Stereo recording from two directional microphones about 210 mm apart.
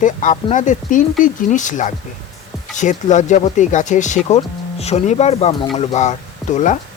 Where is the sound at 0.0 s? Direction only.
40° left (ahead or behind).